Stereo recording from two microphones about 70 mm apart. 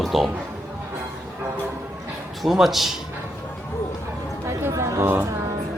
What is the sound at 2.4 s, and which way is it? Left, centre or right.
Speech, centre.